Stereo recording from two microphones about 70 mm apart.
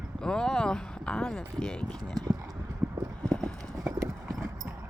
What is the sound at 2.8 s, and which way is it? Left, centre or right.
Clip-clop, centre.